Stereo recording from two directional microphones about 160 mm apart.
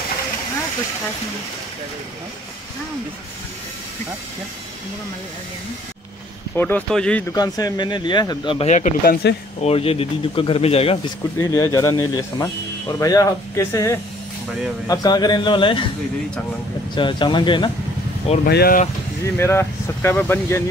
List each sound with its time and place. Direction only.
6.5 s speech: 10° left (ahead or behind)
7.3 s speech: 25° left (ahead or behind)
8.5 s speech: 50° left (ahead or behind)
9.0 s speech: 70° left (ahead or behind)
9.6 s a man's voice: 40° left (ahead or behind)
11.3 s speech: 20° left (ahead or behind)
16.9 s speech: 30° left (ahead or behind)
18.4 s speech: 75° left (ahead or behind)
19.3 s speech: 15° left (ahead or behind)